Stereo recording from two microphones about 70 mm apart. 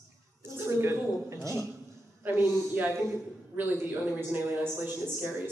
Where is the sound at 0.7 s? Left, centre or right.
Right.